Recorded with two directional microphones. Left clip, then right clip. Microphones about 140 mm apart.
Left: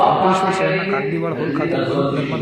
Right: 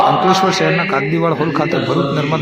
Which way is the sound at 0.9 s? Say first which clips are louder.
Right 5 dB; 30° right (ahead or behind).